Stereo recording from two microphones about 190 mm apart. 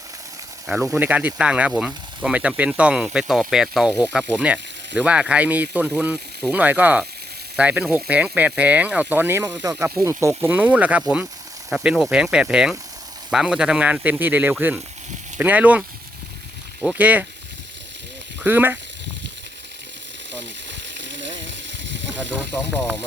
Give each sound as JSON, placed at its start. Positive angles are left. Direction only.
{"t": 0.7, "sound": "speech", "side_deg": -10}
{"t": 16.8, "sound": "speech", "side_deg": -10}
{"t": 18.4, "sound": "speech", "side_deg": -10}
{"t": 20.3, "sound": "a sound", "side_deg": -70}